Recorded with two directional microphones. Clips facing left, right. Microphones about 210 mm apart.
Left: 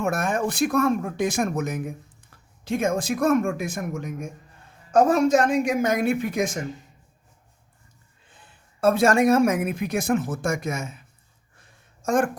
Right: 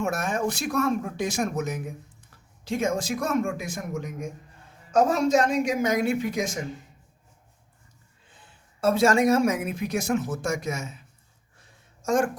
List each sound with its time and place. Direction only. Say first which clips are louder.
0.0 s speech: left 2 dB; 55° left (ahead or behind)
8.8 s speech: left 2 dB; 55° left (ahead or behind)
12.0 s speech: left 1 dB; 55° left (ahead or behind)